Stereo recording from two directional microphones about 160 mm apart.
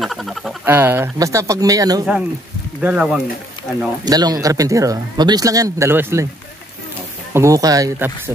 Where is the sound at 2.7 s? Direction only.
5° right (ahead or behind).